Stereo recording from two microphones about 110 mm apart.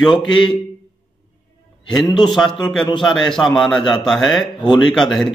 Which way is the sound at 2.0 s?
40° left (ahead or behind).